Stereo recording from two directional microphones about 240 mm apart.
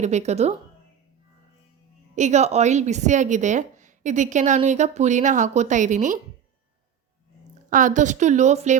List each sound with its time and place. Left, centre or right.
0.0 s a woman's voice: right
2.1 s a woman's voice: right
7.7 s a woman's voice: right